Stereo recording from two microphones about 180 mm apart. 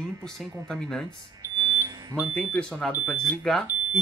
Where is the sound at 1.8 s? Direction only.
20° right (ahead or behind).